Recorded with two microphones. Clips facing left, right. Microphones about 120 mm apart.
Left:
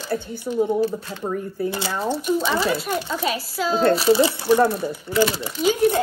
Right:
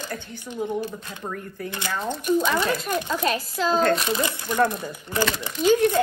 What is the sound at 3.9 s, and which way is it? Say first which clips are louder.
Speech: left 8 dB; 30° left (ahead or behind).